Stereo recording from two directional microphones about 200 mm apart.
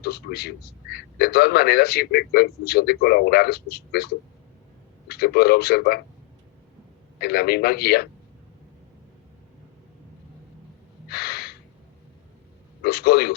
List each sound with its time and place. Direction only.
0.0 s a man's voice: 50° left (ahead or behind)
7.2 s a man's voice: 50° left (ahead or behind)
11.1 s gasp: 50° left (ahead or behind)
12.8 s a man's voice: 50° left (ahead or behind)